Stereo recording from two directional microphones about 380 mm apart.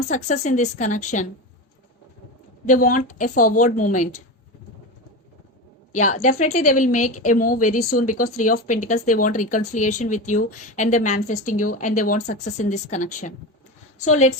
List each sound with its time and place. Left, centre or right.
0.1 s speech: centre
2.6 s speech: left
5.9 s a woman's voice: centre